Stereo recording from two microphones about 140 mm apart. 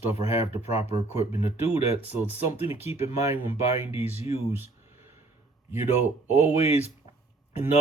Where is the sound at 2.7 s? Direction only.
15° right (ahead or behind).